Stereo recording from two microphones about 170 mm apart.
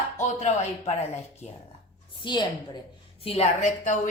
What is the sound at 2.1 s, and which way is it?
A woman's voice, 25° left (ahead or behind).